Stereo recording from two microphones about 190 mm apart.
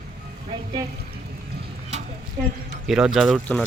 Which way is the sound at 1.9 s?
35° right (ahead or behind).